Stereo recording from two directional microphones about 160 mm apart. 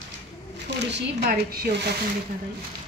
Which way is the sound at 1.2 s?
70° right (ahead or behind).